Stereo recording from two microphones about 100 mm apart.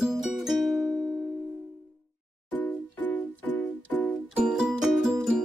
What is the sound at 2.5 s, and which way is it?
Music, 20° left (ahead or behind).